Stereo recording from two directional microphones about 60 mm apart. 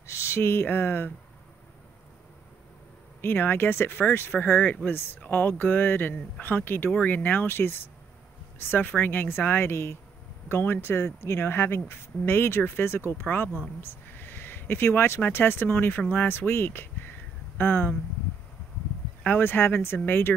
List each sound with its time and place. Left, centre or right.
0.0 s speech: left
3.2 s speech: left
6.9 s speech: left
13.7 s a sound: left
15.2 s speech: left
19.2 s speech: left